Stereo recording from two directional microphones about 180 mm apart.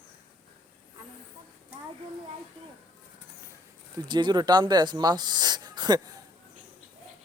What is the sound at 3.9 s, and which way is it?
Speech, 25° right (ahead or behind).